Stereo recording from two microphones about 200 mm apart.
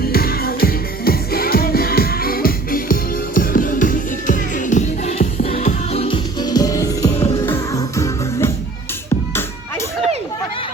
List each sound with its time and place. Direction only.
0.0 s music: 50° left (ahead or behind); by 8.5 s 15° left (ahead or behind)